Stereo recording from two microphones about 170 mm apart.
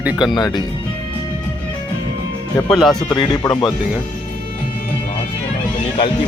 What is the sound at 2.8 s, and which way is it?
Speech, 30° left (ahead or behind).